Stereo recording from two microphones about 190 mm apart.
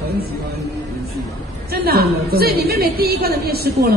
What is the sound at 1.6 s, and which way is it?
A woman's voice, 55° right (ahead or behind).